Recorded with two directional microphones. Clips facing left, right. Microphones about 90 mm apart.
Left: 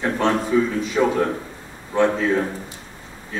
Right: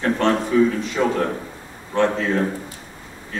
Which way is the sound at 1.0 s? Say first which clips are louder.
Left 3 dB; 5° left (ahead or behind).